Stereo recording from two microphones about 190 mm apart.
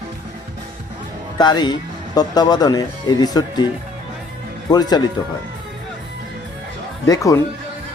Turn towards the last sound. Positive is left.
turn(degrees=15)  # may be behind; listen again after turning